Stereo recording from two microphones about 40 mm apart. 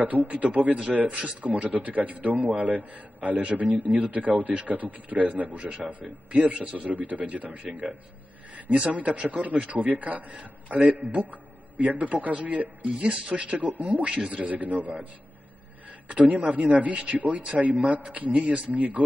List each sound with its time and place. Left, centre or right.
0.0 s a man's voice: right
1.0 s speech: right
1.4 s a man's voice: right
8.9 s a man's voice: right
13.0 s a man's voice: right
14.5 s speech: right
16.1 s a man's voice: right